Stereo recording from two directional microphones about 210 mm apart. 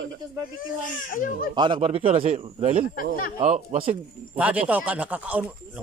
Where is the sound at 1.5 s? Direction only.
25° right (ahead or behind).